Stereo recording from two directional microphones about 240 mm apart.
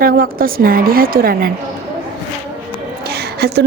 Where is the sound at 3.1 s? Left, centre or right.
Right.